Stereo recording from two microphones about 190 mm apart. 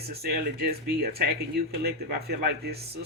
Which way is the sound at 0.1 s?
55° right (ahead or behind).